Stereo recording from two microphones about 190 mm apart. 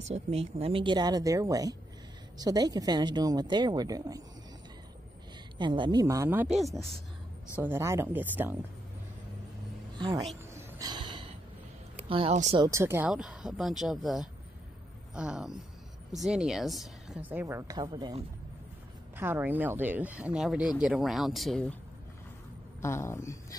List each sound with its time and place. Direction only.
0.1 s speech: 35° right (ahead or behind)
5.6 s a woman's voice: 25° right (ahead or behind); by 7.0 s centre (ahead or behind)
7.5 s a woman's voice: 10° right (ahead or behind)
9.9 s speech: 25° right (ahead or behind)
10.5 s a sound: 20° right (ahead or behind)
12.1 s speech: 30° right (ahead or behind)
12.5 s a woman's voice: 15° right (ahead or behind)
19.1 s speech: 10° right (ahead or behind)
22.8 s speech: 15° left (ahead or behind)